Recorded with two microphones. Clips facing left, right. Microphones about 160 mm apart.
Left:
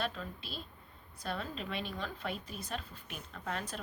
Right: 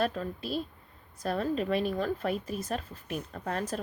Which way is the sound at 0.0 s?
45° right (ahead or behind).